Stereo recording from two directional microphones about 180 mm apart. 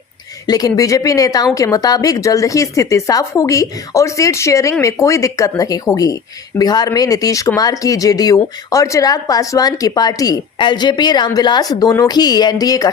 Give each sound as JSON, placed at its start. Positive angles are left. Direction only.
{"t": 0.4, "sound": "speech", "side_deg": 20}